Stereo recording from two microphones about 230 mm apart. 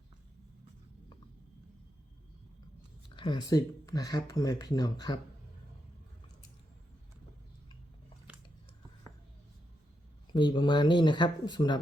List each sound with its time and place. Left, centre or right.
3.2 s speech: centre
10.3 s speech: centre